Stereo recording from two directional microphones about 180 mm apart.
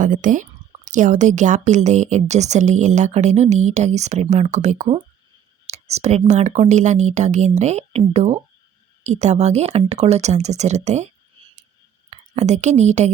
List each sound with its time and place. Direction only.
0.0 s a woman's voice: 45° right (ahead or behind)
12.1 s a woman's voice: 40° right (ahead or behind)